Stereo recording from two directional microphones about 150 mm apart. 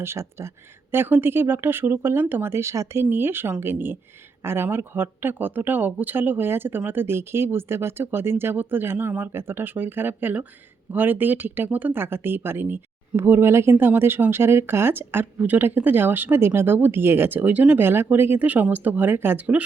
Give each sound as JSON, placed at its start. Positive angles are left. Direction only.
{"t": 0.0, "sound": "speech", "side_deg": -15}